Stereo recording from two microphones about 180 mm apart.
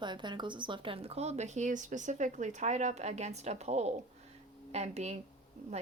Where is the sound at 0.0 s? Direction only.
25° right (ahead or behind).